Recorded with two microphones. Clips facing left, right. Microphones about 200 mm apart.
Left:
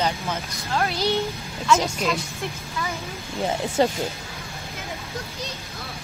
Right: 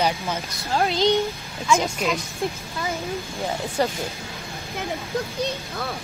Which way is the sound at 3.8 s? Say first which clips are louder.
Left 3 dB; 20° left (ahead or behind).